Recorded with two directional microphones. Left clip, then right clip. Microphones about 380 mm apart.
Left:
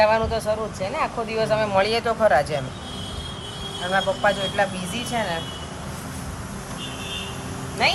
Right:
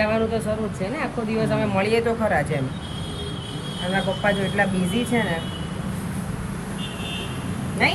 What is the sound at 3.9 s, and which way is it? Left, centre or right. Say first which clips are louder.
Speech: left 2 dB; centre.